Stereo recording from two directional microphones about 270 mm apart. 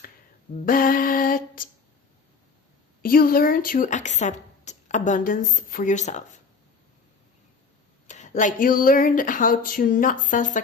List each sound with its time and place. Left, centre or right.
0.6 s lullaby: left
3.0 s speech: left
8.0 s speech: left